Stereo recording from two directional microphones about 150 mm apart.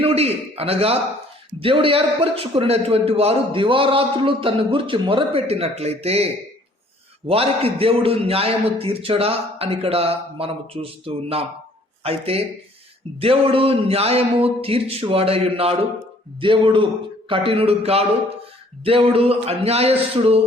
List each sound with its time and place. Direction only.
0.0 s a man's voice: 40° right (ahead or behind)